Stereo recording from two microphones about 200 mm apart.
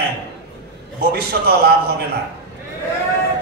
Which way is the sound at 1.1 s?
50° right (ahead or behind).